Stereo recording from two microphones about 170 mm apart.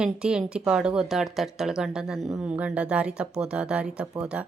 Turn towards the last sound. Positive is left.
turn(degrees=-5)  # may be behind; listen again after turning